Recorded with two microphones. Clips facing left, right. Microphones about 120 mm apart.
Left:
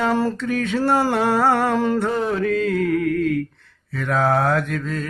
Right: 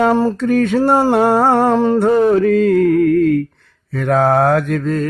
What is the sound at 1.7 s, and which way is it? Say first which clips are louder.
Mantra: right 6 dB; 30° right (ahead or behind).